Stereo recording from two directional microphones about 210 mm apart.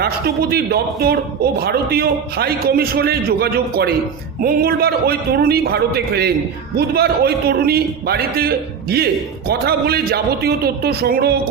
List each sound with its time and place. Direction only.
0.0 s a man's voice: 50° right (ahead or behind)